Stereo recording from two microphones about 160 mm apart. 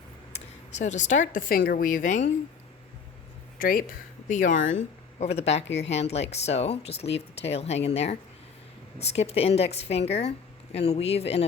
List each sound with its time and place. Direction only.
0.3 s speech: 50° left (ahead or behind); by 1.9 s 70° left (ahead or behind)
1.9 s speech: 55° left (ahead or behind)
3.6 s speech: 65° left (ahead or behind)
4.3 s a woman's voice: 50° left (ahead or behind)